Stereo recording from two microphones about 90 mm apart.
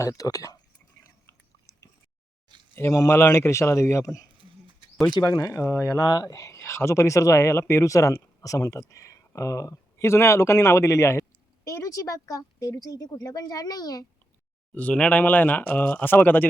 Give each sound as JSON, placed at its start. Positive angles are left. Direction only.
{"t": 0.0, "sound": "speech", "side_deg": 40}
{"t": 2.9, "sound": "speech", "side_deg": 35}
{"t": 14.8, "sound": "speech", "side_deg": 15}